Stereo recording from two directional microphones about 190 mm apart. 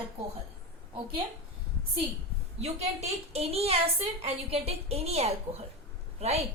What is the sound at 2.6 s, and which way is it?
A woman's voice, 35° right (ahead or behind).